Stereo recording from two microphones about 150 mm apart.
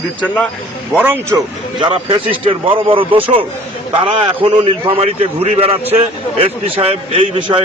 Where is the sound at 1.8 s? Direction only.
35° right (ahead or behind).